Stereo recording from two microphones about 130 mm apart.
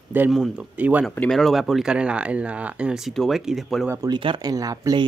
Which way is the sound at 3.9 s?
25° right (ahead or behind).